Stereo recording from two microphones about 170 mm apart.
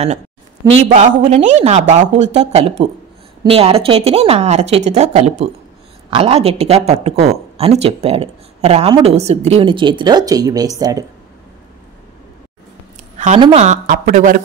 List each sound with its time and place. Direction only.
0.8 s a woman's voice: 45° right (ahead or behind); by 11.1 s 20° right (ahead or behind)
13.4 s a woman's voice: 35° right (ahead or behind); by 14.4 s 50° right (ahead or behind)